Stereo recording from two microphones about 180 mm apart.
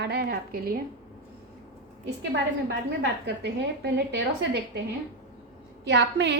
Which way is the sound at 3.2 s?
70° right (ahead or behind).